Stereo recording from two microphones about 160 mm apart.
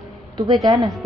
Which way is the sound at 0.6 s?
Centre (ahead or behind).